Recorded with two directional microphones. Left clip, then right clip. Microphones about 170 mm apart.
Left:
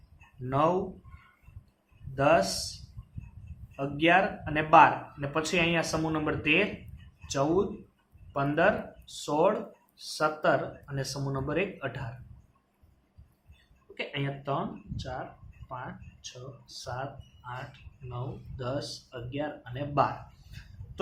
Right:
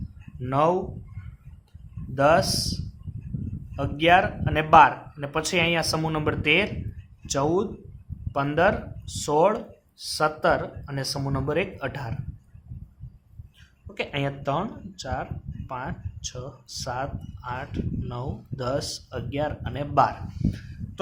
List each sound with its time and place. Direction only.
0.5 s speech: 40° right (ahead or behind)
2.1 s speech: 40° right (ahead or behind)
3.8 s speech: 40° right (ahead or behind)
13.9 s speech: 50° right (ahead or behind)